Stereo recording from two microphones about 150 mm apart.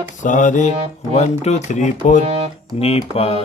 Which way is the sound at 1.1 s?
45° left (ahead or behind).